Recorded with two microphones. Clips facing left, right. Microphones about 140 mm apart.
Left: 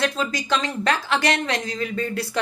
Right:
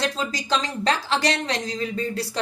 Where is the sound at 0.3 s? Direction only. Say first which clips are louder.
Left 1 dB; 30° right (ahead or behind).